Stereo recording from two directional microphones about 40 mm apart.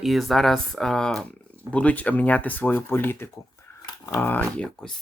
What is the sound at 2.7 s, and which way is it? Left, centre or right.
Speech, left.